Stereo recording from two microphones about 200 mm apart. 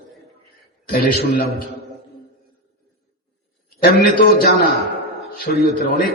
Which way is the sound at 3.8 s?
50° left (ahead or behind).